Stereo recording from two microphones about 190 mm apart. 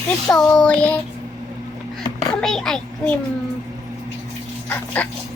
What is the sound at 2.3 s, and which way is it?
Speech, 5° left (ahead or behind).